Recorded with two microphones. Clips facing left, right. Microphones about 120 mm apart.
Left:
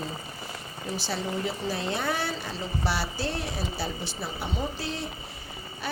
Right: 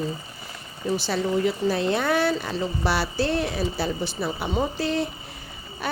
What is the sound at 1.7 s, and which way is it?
A woman's voice, 65° right (ahead or behind).